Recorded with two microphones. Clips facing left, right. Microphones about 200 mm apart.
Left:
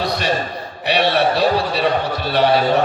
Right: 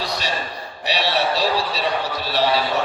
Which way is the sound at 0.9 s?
55° left (ahead or behind).